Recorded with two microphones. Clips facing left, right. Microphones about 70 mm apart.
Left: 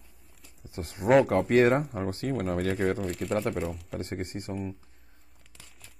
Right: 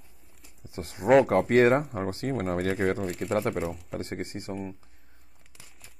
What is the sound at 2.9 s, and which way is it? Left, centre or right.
Speech, centre.